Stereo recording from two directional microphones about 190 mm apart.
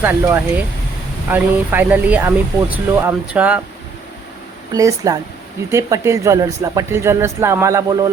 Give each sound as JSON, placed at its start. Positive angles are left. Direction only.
{"t": 0.0, "sound": "speech", "side_deg": -10}
{"t": 4.7, "sound": "a woman's voice", "side_deg": -20}